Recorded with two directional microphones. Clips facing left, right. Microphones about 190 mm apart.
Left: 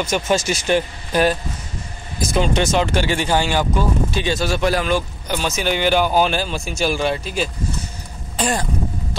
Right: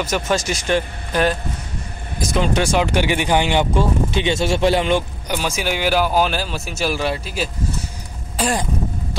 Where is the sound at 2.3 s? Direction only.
10° right (ahead or behind).